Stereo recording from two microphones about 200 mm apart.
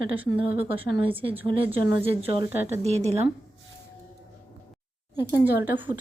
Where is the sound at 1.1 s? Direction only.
25° right (ahead or behind).